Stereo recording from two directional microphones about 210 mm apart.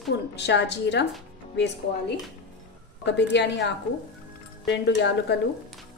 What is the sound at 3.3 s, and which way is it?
A woman's voice, 55° left (ahead or behind).